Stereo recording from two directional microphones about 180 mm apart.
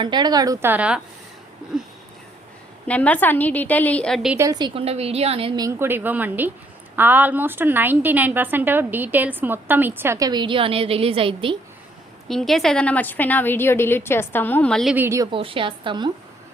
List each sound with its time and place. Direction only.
0.0 s a woman's voice: 25° right (ahead or behind); by 1.0 s 5° right (ahead or behind)
2.8 s a woman's voice: 5° left (ahead or behind)
4.4 s a woman's voice: 20° right (ahead or behind)
5.6 s a woman's voice: 10° right (ahead or behind); by 11.5 s 30° right (ahead or behind)
12.3 s a woman's voice: centre (ahead or behind)
14.9 s a woman's voice: 15° right (ahead or behind)
15.3 s a woman's voice: 30° right (ahead or behind)